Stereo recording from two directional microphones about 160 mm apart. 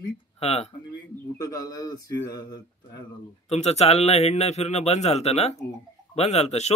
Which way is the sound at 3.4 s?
40° left (ahead or behind).